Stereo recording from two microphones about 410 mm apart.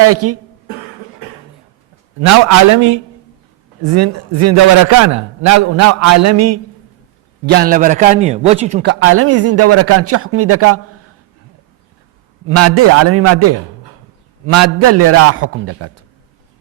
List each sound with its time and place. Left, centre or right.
0.1 s a man's voice: right
2.2 s a man's voice: right
7.4 s a man's voice: right
12.5 s a man's voice: right